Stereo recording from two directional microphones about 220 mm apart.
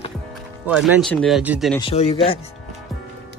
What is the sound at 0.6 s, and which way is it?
Speech, 5° right (ahead or behind).